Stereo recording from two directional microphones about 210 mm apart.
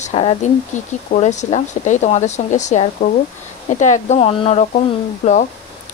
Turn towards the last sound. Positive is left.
turn(degrees=35)  # may be behind; listen again after turning